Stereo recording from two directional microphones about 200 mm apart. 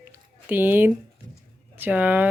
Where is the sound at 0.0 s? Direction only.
10° right (ahead or behind).